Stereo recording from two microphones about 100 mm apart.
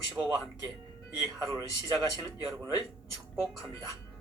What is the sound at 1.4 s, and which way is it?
Speech, 35° right (ahead or behind).